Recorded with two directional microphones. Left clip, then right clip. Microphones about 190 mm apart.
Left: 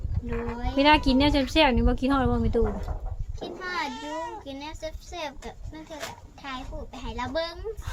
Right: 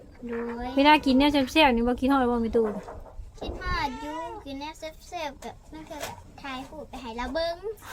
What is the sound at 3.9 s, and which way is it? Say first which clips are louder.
Speech: left 1 dB; 50° left (ahead or behind).